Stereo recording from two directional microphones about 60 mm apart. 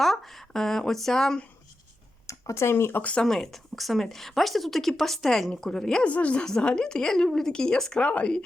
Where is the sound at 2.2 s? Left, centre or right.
Left.